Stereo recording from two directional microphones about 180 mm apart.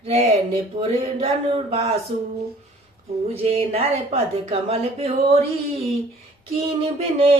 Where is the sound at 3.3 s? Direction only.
30° right (ahead or behind).